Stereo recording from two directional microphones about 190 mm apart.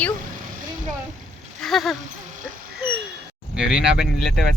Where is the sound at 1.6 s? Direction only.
Centre (ahead or behind).